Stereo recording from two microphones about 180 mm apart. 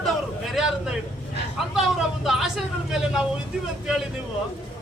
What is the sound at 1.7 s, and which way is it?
Speech, centre (ahead or behind).